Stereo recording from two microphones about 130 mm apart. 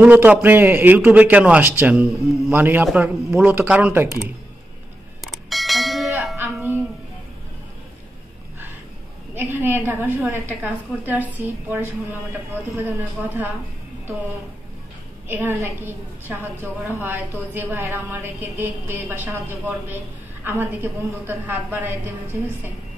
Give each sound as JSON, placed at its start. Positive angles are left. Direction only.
{"t": 0.0, "sound": "a woman's voice", "side_deg": -15}
{"t": 5.2, "sound": "bell", "side_deg": 0}
{"t": 6.3, "sound": "music", "side_deg": -15}
{"t": 9.3, "sound": "a woman's voice", "side_deg": -15}
{"t": 15.2, "sound": "a woman's voice", "side_deg": -15}